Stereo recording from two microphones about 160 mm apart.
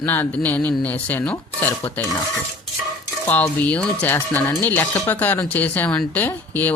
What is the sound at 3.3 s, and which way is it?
Speech, 10° left (ahead or behind).